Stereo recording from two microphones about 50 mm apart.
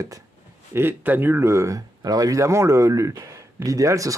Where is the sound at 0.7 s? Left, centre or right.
Right.